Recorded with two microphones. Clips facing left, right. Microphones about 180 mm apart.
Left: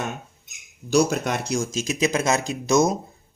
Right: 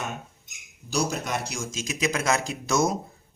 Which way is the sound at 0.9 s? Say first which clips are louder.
Left 7 dB; 65° left (ahead or behind).